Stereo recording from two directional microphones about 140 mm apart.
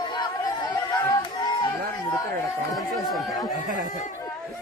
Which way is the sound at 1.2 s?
30° left (ahead or behind).